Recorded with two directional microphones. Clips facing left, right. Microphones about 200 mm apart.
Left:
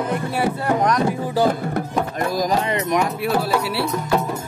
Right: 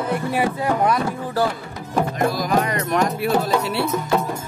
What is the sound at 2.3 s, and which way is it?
Speech, 45° left (ahead or behind).